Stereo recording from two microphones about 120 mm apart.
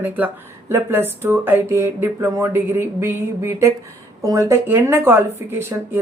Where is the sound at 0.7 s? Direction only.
20° right (ahead or behind).